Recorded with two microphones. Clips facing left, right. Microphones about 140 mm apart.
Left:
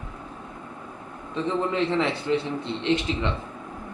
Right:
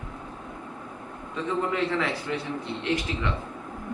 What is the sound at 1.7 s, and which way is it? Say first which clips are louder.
Speech: left 3 dB; 25° left (ahead or behind).